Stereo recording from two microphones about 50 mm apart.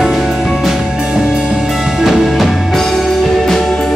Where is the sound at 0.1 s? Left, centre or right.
Centre.